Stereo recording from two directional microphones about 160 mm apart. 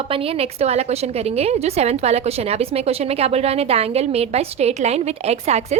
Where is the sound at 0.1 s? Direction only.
35° right (ahead or behind).